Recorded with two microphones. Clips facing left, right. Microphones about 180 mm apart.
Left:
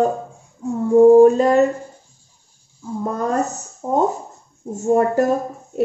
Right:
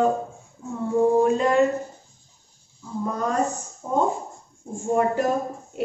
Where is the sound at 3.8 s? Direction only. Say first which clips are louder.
Left 4 dB; 40° left (ahead or behind).